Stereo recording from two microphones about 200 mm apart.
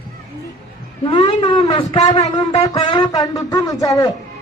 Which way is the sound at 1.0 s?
25° left (ahead or behind).